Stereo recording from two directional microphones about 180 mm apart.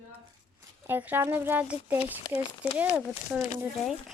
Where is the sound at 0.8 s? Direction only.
10° right (ahead or behind).